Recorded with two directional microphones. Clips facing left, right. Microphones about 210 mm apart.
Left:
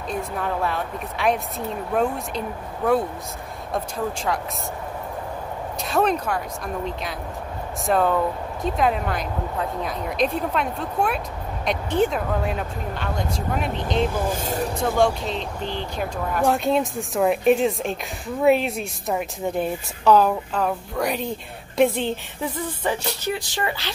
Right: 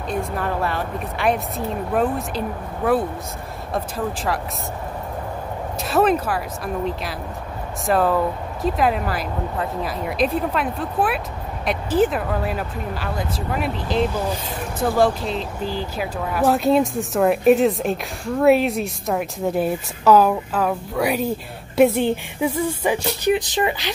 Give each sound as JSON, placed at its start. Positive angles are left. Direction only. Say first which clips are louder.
{"t": 0.1, "sound": "a woman's voice", "louder": "right 2 dB", "side_deg": 0}
{"t": 5.9, "sound": "a woman's voice", "louder": "right 3 dB", "side_deg": -5}
{"t": 14.3, "sound": "speech", "louder": "left 3 dB", "side_deg": 45}
{"t": 14.8, "sound": "a woman's voice", "louder": "right 3 dB", "side_deg": -5}